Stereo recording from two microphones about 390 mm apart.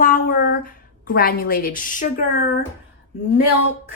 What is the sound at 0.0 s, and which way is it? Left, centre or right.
A woman's voice, left.